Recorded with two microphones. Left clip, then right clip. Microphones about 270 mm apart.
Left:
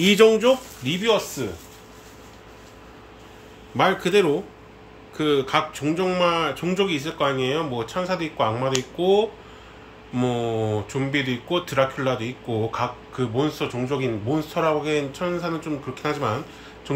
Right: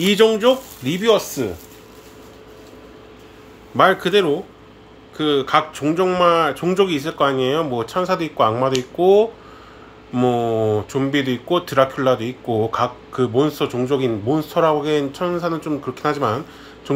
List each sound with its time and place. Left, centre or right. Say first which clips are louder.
0.0 s speech: right 1 dB; centre
3.7 s speech: right 5 dB; centre